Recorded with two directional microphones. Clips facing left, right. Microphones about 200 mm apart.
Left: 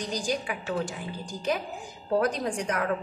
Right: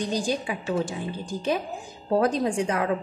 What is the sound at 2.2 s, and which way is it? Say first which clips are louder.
Speech: right 4 dB; 25° right (ahead or behind).